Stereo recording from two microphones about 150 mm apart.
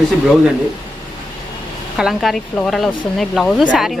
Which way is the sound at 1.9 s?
Centre (ahead or behind).